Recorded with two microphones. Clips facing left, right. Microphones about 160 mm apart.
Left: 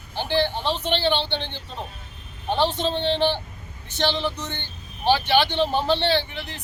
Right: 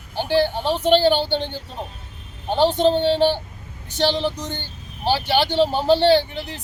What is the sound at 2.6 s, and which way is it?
Speech, 40° right (ahead or behind).